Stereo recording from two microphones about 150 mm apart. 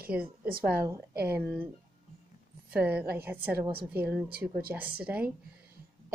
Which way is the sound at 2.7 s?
10° right (ahead or behind).